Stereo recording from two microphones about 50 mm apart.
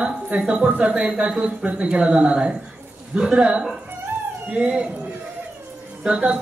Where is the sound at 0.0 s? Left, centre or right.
Right.